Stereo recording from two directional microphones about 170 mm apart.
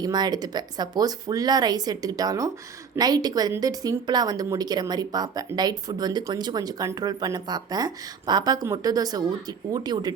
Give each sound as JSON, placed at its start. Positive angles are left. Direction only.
{"t": 0.0, "sound": "speech", "side_deg": -25}